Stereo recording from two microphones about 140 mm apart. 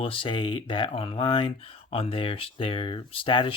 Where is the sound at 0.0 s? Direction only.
40° left (ahead or behind).